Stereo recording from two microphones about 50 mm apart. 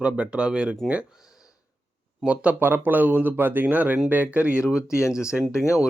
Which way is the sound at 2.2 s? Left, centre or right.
Right.